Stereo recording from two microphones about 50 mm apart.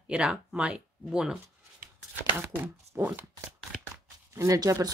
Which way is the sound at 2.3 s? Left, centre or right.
Right.